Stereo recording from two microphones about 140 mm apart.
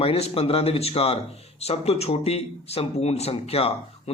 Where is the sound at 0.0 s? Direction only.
45° left (ahead or behind).